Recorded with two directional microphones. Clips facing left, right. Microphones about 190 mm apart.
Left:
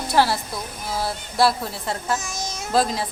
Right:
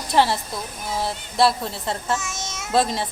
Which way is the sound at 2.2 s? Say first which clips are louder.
Left 1 dB; 35° left (ahead or behind).